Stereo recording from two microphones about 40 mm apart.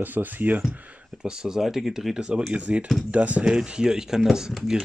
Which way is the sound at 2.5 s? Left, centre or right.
Right.